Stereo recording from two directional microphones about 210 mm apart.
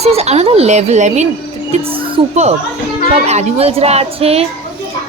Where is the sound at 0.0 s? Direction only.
30° right (ahead or behind).